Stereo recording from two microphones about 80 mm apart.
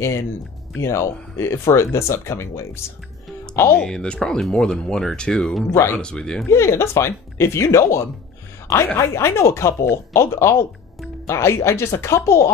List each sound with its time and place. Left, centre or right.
0.7 s speech: left
3.8 s speech: centre
5.7 s speech: left
5.9 s speech: centre
6.5 s speech: left